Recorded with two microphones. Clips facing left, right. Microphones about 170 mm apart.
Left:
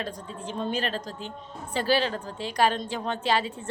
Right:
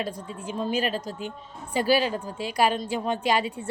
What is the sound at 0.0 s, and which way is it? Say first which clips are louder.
A woman's voice: right 2 dB; 10° right (ahead or behind).